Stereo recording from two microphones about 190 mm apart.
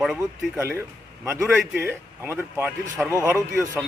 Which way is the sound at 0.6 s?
15° right (ahead or behind).